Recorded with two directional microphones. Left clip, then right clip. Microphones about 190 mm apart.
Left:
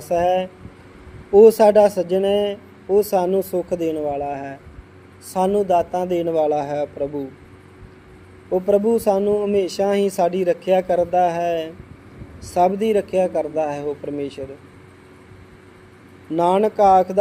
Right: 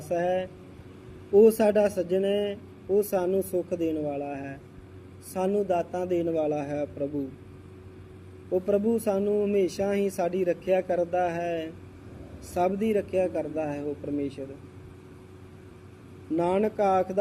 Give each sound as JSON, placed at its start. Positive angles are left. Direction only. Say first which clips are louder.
{"t": 0.1, "sound": "speech", "louder": "left 9 dB", "side_deg": 25}
{"t": 8.4, "sound": "speech", "louder": "left 7 dB", "side_deg": 45}
{"t": 8.9, "sound": "speech", "louder": "left 8 dB", "side_deg": 25}
{"t": 16.3, "sound": "speech", "louder": "left 8 dB", "side_deg": 25}